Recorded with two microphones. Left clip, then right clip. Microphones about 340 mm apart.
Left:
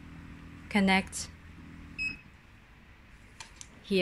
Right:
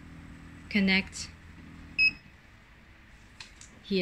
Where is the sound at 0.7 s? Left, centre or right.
Centre.